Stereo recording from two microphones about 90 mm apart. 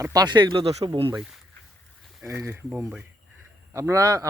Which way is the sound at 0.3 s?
65° right (ahead or behind).